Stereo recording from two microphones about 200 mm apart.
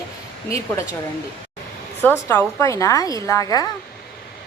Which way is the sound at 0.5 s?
15° left (ahead or behind).